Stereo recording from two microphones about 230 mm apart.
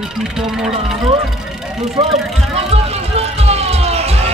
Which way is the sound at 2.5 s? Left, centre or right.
Right.